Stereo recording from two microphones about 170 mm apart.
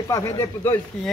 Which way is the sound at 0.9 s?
5° left (ahead or behind).